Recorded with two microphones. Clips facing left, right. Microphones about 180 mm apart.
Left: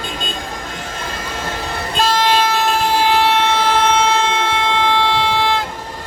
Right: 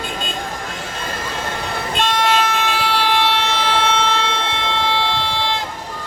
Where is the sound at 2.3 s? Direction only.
35° left (ahead or behind).